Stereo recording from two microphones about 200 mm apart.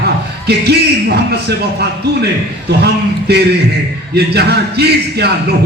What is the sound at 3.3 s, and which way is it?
Speech, 55° right (ahead or behind).